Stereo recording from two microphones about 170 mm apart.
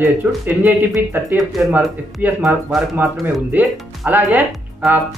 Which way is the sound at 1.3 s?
Centre (ahead or behind).